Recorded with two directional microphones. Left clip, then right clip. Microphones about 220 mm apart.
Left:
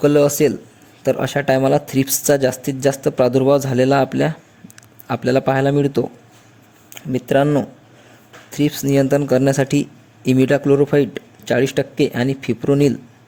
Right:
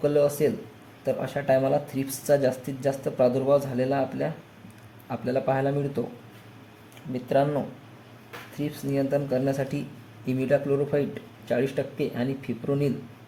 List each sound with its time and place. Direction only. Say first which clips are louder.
0.0 s speech: left 8 dB; 45° left (ahead or behind)